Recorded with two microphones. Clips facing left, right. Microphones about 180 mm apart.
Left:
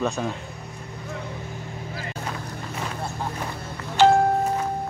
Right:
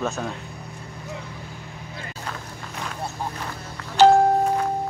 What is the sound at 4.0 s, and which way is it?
Music, 40° right (ahead or behind).